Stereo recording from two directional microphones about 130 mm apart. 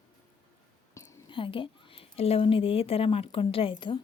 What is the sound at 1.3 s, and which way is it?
A woman's voice, 40° left (ahead or behind).